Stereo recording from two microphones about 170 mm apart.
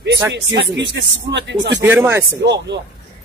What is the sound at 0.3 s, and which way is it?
Speech, 90° right.